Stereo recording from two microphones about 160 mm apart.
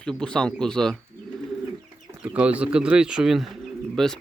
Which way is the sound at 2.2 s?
5° right (ahead or behind).